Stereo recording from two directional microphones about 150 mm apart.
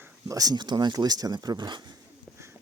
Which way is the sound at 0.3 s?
25° right (ahead or behind).